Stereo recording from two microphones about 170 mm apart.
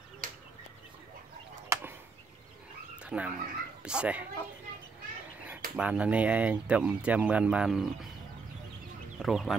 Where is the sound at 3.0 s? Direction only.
5° right (ahead or behind).